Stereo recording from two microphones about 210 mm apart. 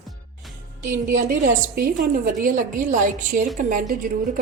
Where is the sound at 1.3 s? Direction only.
45° right (ahead or behind).